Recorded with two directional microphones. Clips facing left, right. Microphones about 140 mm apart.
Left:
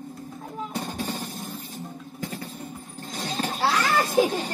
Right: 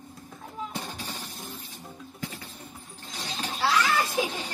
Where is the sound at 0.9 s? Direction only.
45° left (ahead or behind).